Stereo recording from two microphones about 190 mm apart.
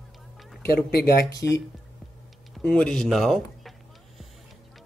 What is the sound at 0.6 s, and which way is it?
Speech, 50° left (ahead or behind).